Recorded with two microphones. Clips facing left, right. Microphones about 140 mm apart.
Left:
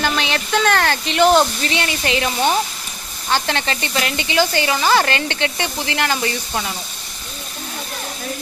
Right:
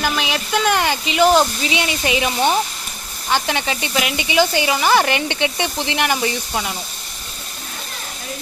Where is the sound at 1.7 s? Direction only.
15° right (ahead or behind).